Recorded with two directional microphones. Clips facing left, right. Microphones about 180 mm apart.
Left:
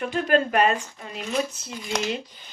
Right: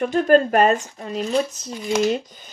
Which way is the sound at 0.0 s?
40° right (ahead or behind).